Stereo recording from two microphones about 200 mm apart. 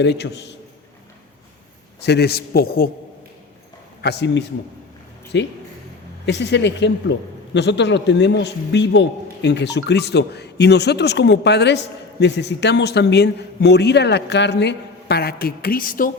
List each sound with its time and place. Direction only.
0.0 s a man's voice: 60° left (ahead or behind)
2.0 s a man's voice: 55° left (ahead or behind)
4.0 s a man's voice: 55° left (ahead or behind)